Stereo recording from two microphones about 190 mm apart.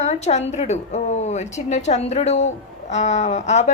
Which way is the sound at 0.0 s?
35° left (ahead or behind).